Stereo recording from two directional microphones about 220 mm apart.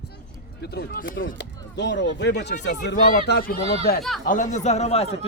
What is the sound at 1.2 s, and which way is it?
Speech, 50° left (ahead or behind).